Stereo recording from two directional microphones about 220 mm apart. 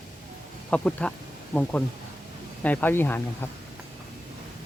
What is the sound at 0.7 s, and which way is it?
Speech, 5° left (ahead or behind).